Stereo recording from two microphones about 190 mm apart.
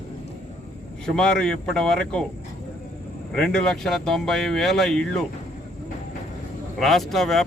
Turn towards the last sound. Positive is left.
turn(degrees=0)  # may be behind; listen again after turning